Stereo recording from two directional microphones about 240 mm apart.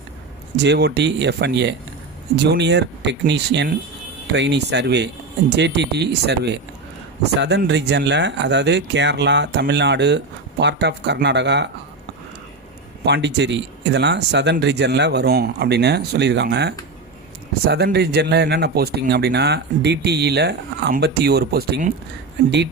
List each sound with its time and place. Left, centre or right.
0.5 s speech: right
13.1 s speech: right